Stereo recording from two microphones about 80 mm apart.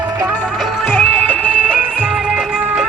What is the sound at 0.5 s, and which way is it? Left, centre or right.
Music, centre.